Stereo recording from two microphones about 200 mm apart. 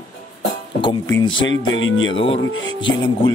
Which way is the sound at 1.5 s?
70° left (ahead or behind).